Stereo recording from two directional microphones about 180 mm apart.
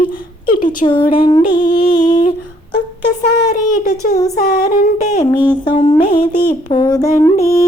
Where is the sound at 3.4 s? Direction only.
45° left (ahead or behind).